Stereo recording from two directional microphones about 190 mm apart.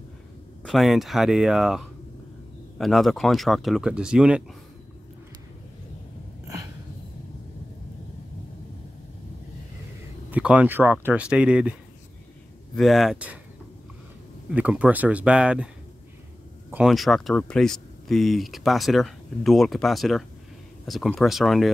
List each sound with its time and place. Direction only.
0.7 s speech: centre (ahead or behind)
10.3 s speech: 5° right (ahead or behind)
12.7 s speech: centre (ahead or behind)
14.5 s speech: 5° right (ahead or behind)
16.7 s speech: centre (ahead or behind)